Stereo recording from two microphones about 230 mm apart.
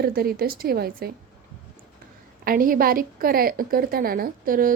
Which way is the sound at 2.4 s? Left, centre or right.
Right.